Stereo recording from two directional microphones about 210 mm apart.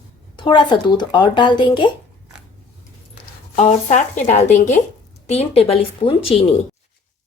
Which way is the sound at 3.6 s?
35° left (ahead or behind).